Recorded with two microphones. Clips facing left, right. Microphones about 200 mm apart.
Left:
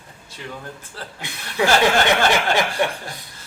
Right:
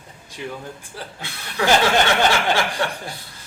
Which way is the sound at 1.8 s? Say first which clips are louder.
Left 1 dB; 15° left (ahead or behind).